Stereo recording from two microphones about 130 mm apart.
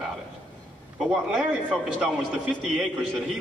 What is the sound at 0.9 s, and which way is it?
A man's voice, centre (ahead or behind).